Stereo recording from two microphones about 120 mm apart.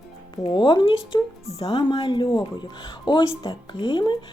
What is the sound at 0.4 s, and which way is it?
A woman's voice, 45° left (ahead or behind).